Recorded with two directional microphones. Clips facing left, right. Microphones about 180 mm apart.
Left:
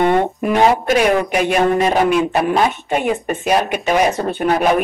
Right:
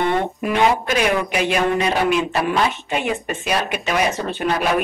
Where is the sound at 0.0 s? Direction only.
50° left (ahead or behind).